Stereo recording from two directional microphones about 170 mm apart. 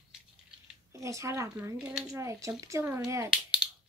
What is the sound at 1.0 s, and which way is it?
Speech, 20° right (ahead or behind).